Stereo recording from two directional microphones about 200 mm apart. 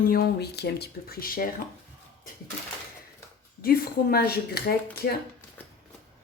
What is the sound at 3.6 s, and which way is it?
Speech, 50° left (ahead or behind).